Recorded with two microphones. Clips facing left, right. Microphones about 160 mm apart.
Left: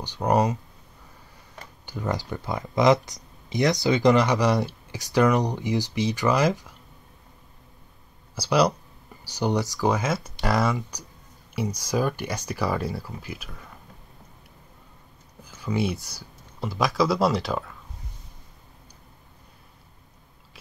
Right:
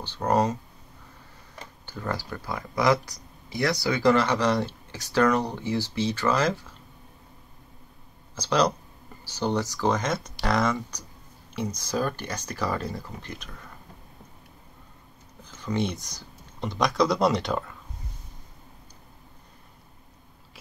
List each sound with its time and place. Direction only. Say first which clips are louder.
0.0 s speech: left 1 dB; 15° left (ahead or behind)
1.9 s speech: left 3 dB; 15° left (ahead or behind)
8.4 s speech: left 2 dB; 10° left (ahead or behind)
15.4 s a sound: left 2 dB; 10° left (ahead or behind)
16.5 s speech: even; 5° left (ahead or behind)